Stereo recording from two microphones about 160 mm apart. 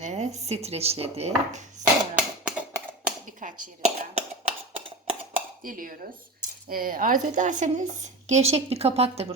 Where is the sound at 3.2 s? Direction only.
55° right (ahead or behind).